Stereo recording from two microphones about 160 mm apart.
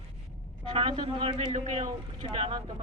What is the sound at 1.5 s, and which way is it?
Speech, 45° right (ahead or behind).